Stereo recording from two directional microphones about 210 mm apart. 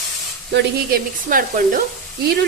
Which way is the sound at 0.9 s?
40° right (ahead or behind).